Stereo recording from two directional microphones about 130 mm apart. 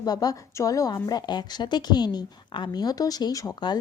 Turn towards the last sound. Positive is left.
turn(degrees=35)  # may be behind; listen again after turning